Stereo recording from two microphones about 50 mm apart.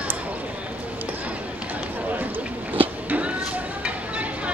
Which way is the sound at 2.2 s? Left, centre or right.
Right.